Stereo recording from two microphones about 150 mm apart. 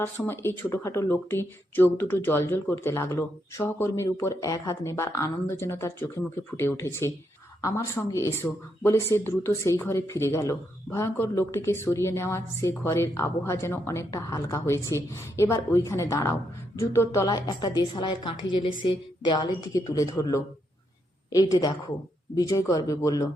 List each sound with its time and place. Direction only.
0.0 s a woman's voice: 15° left (ahead or behind)